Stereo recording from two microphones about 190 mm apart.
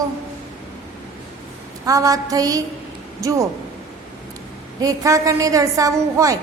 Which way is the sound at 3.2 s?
15° right (ahead or behind).